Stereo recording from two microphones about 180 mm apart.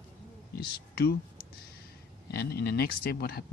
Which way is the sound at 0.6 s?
60° left (ahead or behind).